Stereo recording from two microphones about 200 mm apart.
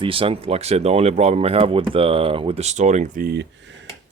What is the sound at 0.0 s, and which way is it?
Speech, 25° right (ahead or behind).